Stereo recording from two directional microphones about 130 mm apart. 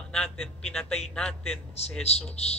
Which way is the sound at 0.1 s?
5° left (ahead or behind).